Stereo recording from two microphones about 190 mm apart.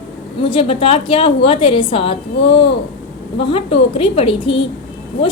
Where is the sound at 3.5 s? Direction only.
30° left (ahead or behind).